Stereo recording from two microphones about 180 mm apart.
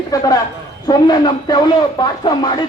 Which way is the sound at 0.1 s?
20° left (ahead or behind).